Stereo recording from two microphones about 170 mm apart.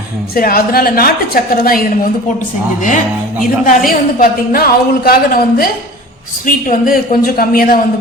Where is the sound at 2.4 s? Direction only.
50° left (ahead or behind).